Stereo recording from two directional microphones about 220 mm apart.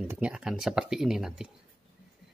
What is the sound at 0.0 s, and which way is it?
Speech, 5° right (ahead or behind).